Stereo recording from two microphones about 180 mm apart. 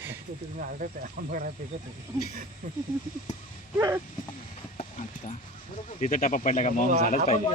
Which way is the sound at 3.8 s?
15° right (ahead or behind).